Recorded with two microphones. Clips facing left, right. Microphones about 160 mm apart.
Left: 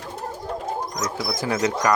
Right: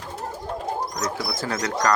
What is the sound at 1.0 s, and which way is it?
Speech, 20° left (ahead or behind).